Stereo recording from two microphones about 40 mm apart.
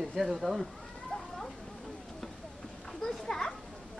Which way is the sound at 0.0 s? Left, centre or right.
Centre.